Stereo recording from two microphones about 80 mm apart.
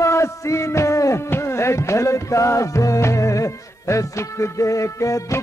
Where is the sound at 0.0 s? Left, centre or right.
Left.